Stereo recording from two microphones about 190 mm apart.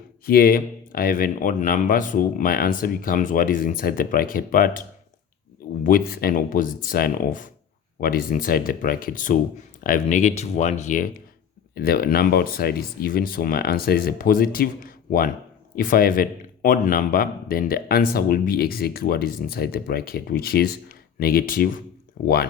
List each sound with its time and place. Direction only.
0.3 s speech: 50° left (ahead or behind)
5.8 s speech: 50° left (ahead or behind)
11.7 s speech: 50° left (ahead or behind)